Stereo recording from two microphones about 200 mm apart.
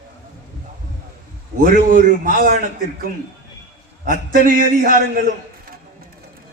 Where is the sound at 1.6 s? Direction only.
45° right (ahead or behind).